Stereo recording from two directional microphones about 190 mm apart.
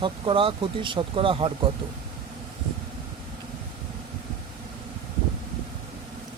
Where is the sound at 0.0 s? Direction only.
25° right (ahead or behind).